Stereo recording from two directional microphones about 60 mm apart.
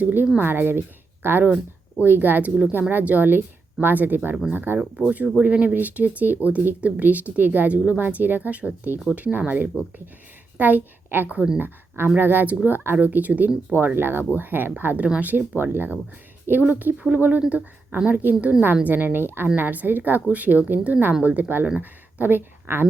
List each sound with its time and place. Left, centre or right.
0.0 s speech: right
5.0 s speech: right
9.7 s speech: left
10.6 s a woman's voice: right
15.0 s speech: right
21.4 s speech: right